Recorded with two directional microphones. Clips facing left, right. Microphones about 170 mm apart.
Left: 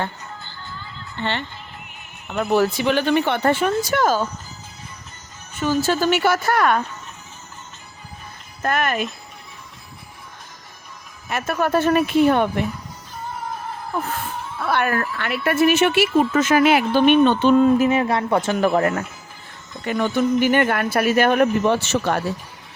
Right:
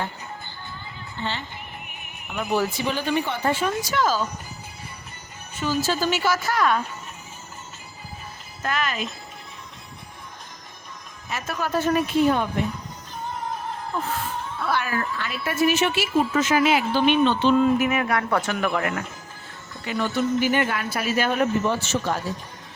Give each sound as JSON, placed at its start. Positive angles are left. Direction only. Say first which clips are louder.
{"t": 1.2, "sound": "speech", "louder": "left 5 dB", "side_deg": 65}
{"t": 5.5, "sound": "a woman's voice", "louder": "left 4 dB", "side_deg": 55}
{"t": 8.6, "sound": "a woman's voice", "louder": "left 5 dB", "side_deg": 55}
{"t": 11.3, "sound": "a woman's voice", "louder": "left 6 dB", "side_deg": 60}
{"t": 14.7, "sound": "a woman's voice", "louder": "left 5 dB", "side_deg": 60}
{"t": 17.7, "sound": "speech", "louder": "left 4 dB", "side_deg": 30}
{"t": 18.5, "sound": "speech", "louder": "left 6 dB", "side_deg": 35}
{"t": 19.8, "sound": "a woman's voice", "louder": "left 4 dB", "side_deg": 50}